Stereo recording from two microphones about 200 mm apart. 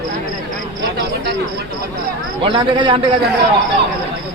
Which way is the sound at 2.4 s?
25° right (ahead or behind).